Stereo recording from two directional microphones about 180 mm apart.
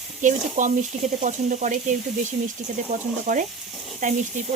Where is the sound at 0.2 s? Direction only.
45° right (ahead or behind).